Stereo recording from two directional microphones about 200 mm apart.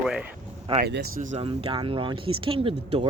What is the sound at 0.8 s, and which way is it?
Speech, 55° right (ahead or behind).